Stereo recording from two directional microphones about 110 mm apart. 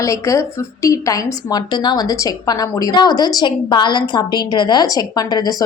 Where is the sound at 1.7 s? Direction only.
40° left (ahead or behind).